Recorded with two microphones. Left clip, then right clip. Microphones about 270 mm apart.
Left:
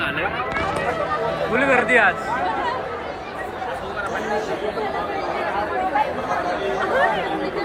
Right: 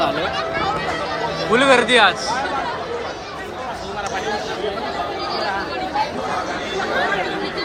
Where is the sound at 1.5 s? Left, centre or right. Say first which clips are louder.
Right 4 dB; centre.